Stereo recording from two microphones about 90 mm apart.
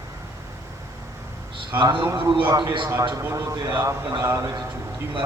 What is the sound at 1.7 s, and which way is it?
Speech, 25° right (ahead or behind).